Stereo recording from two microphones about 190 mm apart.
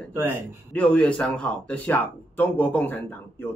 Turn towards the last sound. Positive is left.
turn(degrees=10)  # may be behind; listen again after turning